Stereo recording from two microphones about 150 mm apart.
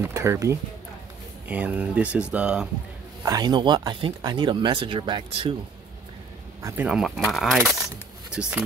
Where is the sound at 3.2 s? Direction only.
25° right (ahead or behind).